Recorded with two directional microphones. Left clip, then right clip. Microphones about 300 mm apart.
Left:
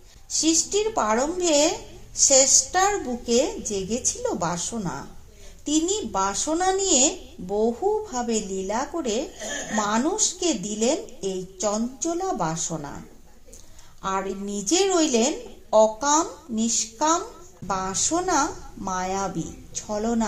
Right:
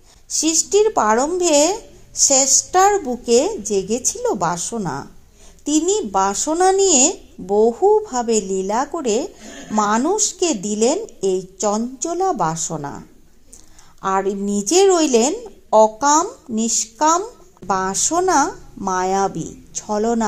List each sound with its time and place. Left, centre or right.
0.3 s speech: right
14.0 s speech: right